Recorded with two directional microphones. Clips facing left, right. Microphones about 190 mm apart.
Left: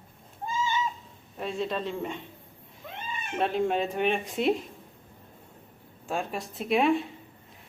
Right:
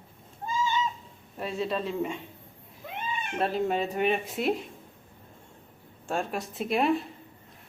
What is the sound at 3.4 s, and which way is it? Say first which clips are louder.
Speech: left 1 dB; centre (ahead or behind).